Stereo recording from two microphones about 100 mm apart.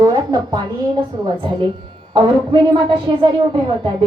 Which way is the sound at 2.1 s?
55° right (ahead or behind).